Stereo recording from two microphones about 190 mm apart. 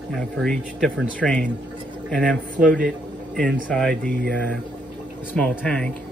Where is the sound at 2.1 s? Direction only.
5° left (ahead or behind).